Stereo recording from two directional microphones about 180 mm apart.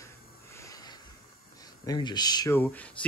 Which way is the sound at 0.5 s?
20° left (ahead or behind).